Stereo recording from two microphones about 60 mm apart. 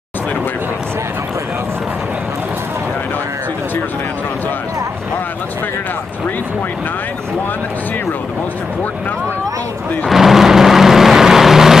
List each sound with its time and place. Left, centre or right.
10.0 s vehicle: centre